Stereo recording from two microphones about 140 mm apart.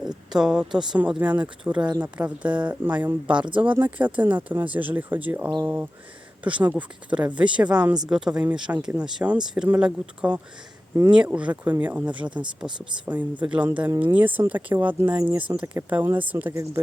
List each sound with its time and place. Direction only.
0.0 s speech: 5° right (ahead or behind)